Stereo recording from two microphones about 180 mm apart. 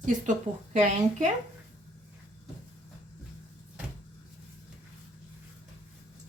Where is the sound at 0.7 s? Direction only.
40° right (ahead or behind).